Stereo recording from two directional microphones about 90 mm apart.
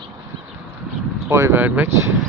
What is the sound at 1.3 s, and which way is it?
Speech, 30° right (ahead or behind).